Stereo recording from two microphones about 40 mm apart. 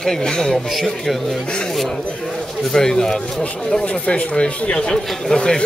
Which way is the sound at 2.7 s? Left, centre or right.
Centre.